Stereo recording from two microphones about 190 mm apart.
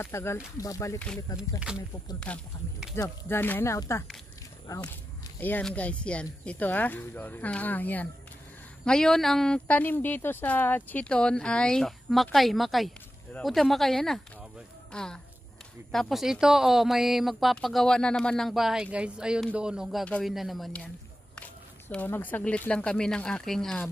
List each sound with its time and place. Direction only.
0.0 s speech: 15° left (ahead or behind)
1.0 s a woman's voice: 5° left (ahead or behind)
2.1 s a woman's voice: 5° left (ahead or behind)